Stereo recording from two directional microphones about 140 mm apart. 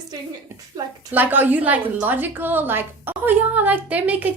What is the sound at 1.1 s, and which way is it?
A woman's voice, 15° right (ahead or behind).